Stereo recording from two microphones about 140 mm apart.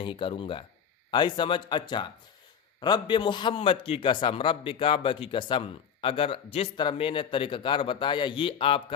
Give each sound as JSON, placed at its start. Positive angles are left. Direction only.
{"t": 0.0, "sound": "a man's voice", "side_deg": 35}